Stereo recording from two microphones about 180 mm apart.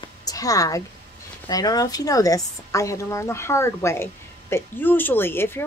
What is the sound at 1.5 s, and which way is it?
A woman's voice, 20° left (ahead or behind).